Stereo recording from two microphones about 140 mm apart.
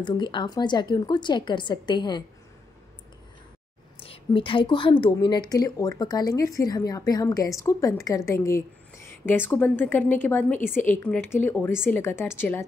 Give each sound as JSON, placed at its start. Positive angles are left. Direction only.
{"t": 0.0, "sound": "a woman's voice", "side_deg": 35}
{"t": 4.0, "sound": "a woman's voice", "side_deg": 40}